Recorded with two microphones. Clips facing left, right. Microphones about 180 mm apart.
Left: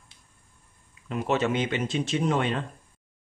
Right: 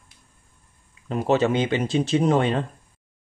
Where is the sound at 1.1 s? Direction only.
35° right (ahead or behind).